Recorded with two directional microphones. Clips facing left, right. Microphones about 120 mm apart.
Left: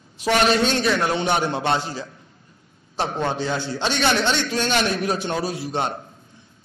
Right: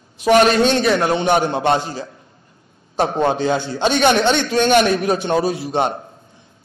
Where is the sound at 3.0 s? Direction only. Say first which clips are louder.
Right 7 dB; 15° right (ahead or behind).